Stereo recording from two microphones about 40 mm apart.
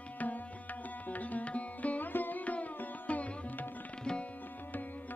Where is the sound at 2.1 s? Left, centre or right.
Left.